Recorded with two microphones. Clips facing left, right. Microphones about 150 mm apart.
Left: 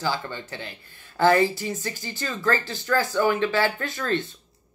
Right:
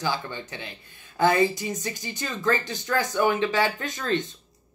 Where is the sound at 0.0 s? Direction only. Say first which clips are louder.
Left 1 dB; 15° right (ahead or behind).